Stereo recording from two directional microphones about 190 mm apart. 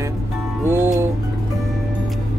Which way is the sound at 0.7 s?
15° right (ahead or behind).